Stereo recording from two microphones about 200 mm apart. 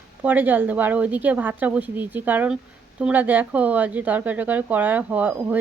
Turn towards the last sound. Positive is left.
turn(degrees=-10)  # may be behind; listen again after turning